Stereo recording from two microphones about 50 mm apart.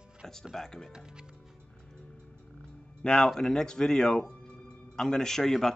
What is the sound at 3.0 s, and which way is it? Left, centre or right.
Speech, centre.